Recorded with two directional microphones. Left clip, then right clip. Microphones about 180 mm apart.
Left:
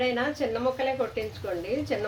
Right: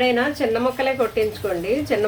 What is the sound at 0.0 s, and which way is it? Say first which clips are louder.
A woman's voice: right 7 dB; 20° right (ahead or behind).